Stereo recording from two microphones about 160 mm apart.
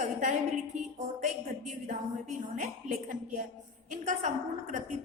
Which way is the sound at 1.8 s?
55° right (ahead or behind).